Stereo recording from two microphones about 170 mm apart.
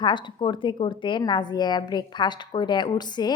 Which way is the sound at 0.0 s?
25° left (ahead or behind).